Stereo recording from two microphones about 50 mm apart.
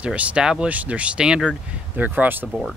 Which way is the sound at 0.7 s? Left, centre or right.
Right.